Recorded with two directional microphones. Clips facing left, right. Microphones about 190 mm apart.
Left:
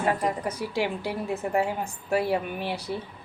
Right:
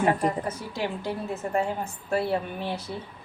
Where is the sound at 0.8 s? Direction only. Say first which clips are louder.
Left 2 dB; 10° left (ahead or behind).